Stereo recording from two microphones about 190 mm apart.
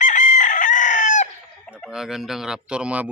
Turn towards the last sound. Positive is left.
turn(degrees=-5)  # may be behind; listen again after turning